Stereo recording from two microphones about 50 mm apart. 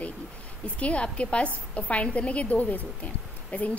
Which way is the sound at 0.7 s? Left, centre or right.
Left.